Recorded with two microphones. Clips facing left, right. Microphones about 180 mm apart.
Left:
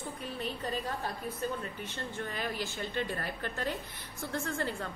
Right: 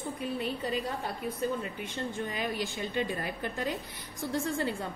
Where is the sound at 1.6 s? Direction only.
15° right (ahead or behind).